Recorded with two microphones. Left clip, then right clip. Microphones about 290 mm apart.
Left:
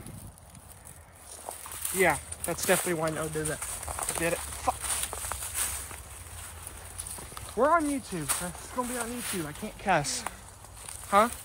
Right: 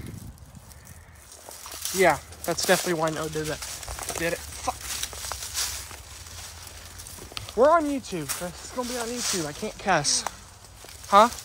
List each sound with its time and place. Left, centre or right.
2.0 s speech: centre
4.0 s a sound: centre
7.5 s speech: centre
8.3 s speech: centre